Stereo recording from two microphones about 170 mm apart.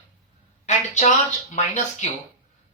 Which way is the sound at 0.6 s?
40° left (ahead or behind).